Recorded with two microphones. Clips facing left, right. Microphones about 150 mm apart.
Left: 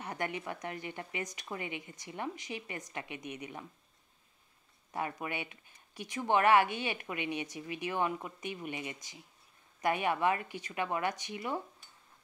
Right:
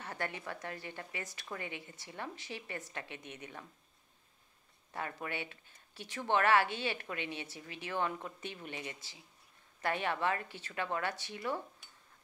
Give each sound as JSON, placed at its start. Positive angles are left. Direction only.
{"t": 0.0, "sound": "a woman's voice", "side_deg": 15}
{"t": 4.9, "sound": "a woman's voice", "side_deg": 20}